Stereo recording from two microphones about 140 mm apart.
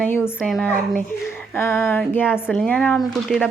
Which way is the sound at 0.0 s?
10° left (ahead or behind).